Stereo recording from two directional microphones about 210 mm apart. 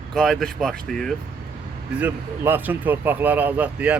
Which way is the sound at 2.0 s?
10° right (ahead or behind).